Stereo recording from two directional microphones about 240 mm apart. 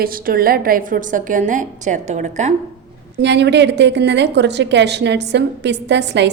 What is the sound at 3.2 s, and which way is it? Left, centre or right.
A woman's voice, right.